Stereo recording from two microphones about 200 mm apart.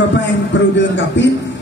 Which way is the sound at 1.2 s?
65° left (ahead or behind).